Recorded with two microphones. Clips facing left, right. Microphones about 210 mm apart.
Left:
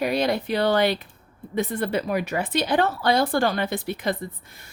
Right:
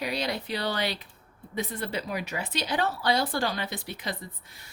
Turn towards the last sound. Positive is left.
turn(degrees=55)  # may be behind; listen again after turning